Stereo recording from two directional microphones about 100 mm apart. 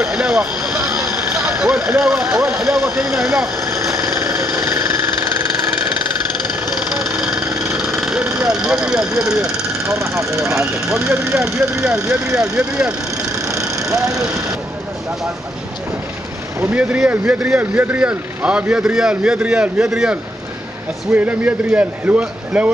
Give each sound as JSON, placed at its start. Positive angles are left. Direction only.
{"t": 0.0, "sound": "vehicle", "side_deg": -5}
{"t": 0.7, "sound": "vehicle", "side_deg": -30}
{"t": 1.6, "sound": "speech", "side_deg": -10}
{"t": 2.2, "sound": "speech", "side_deg": -25}
{"t": 2.5, "sound": "speech", "side_deg": -5}
{"t": 3.9, "sound": "a sound", "side_deg": -30}
{"t": 7.7, "sound": "vehicle", "side_deg": -5}
{"t": 8.5, "sound": "speech", "side_deg": -5}
{"t": 9.8, "sound": "speech", "side_deg": -30}
{"t": 11.3, "sound": "speech", "side_deg": -5}
{"t": 13.5, "sound": "vehicle", "side_deg": -35}
{"t": 13.9, "sound": "speech", "side_deg": -35}
{"t": 16.7, "sound": "speech", "side_deg": -10}